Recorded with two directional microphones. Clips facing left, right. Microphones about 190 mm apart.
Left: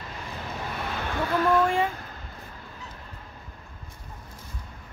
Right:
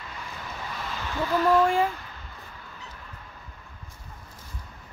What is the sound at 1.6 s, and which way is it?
Speech, centre (ahead or behind).